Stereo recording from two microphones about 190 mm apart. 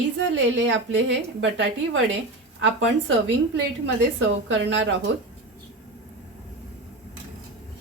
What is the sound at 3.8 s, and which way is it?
A woman's voice, 85° right.